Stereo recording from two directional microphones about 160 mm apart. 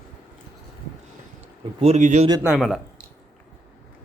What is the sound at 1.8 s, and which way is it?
Speech, 45° right (ahead or behind).